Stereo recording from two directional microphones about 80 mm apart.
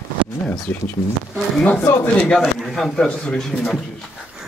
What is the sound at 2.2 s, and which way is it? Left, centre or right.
Speech, centre.